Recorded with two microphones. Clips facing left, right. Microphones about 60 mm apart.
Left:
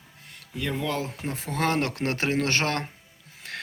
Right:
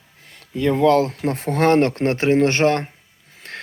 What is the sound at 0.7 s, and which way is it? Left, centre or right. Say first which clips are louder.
Speech: right 14 dB; right.